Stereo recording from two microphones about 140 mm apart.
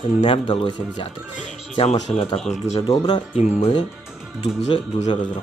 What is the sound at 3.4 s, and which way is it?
Speech, 50° left (ahead or behind).